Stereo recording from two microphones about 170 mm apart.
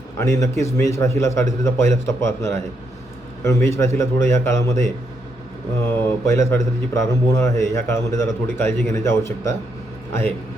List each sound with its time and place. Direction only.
0.2 s a man's voice: 15° left (ahead or behind)